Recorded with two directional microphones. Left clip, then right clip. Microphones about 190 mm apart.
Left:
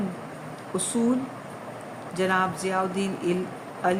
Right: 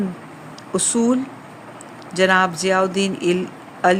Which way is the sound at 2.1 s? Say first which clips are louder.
Right 9 dB; 50° right (ahead or behind).